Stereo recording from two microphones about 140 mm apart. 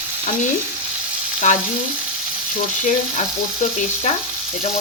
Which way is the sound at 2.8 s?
60° left (ahead or behind).